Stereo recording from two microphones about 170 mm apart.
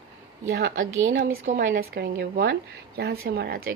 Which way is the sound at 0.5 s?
70° right (ahead or behind).